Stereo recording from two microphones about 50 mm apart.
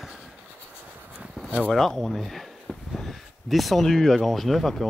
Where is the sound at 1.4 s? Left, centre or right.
Centre.